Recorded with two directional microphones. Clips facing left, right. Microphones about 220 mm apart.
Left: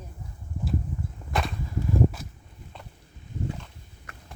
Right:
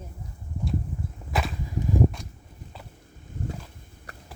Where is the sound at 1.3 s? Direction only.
Centre (ahead or behind).